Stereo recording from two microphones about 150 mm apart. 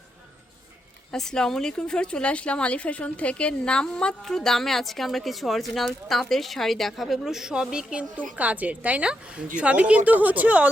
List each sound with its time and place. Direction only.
1.1 s a woman's voice: 5° left (ahead or behind)